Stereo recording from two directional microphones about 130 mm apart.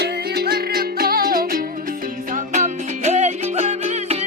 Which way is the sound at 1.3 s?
90° right.